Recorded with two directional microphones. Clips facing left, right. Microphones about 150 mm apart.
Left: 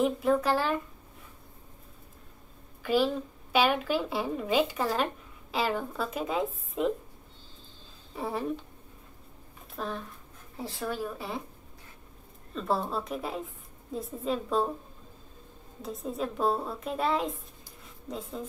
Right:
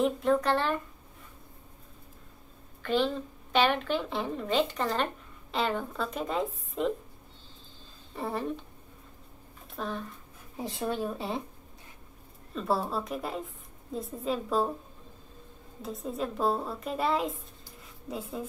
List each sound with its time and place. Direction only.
0.0 s a woman's voice: 5° left (ahead or behind)
2.8 s a woman's voice: 10° left (ahead or behind)
8.1 s a woman's voice: centre (ahead or behind)
9.8 s a woman's voice: centre (ahead or behind)
10.6 s speech: 20° right (ahead or behind)
12.5 s a woman's voice: 5° right (ahead or behind)
15.8 s a woman's voice: centre (ahead or behind)